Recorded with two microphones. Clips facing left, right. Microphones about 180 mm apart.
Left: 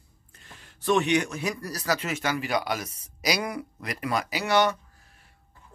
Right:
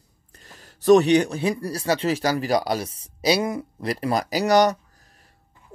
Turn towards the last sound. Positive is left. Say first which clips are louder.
# right 5 dB
turn(degrees=-40)  # may be behind; listen again after turning